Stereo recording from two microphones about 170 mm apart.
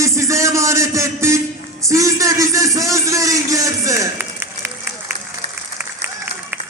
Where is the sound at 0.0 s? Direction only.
20° right (ahead or behind).